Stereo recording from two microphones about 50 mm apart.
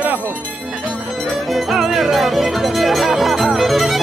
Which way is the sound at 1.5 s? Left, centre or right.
Centre.